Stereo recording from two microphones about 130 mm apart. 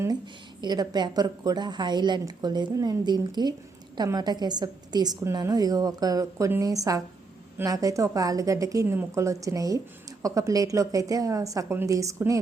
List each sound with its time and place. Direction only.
0.6 s a woman's voice: 35° right (ahead or behind)